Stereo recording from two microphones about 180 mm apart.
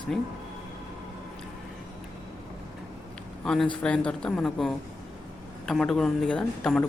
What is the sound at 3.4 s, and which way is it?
A man's voice, centre (ahead or behind).